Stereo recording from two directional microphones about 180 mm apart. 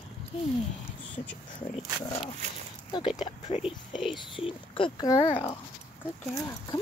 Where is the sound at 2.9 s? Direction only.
25° left (ahead or behind).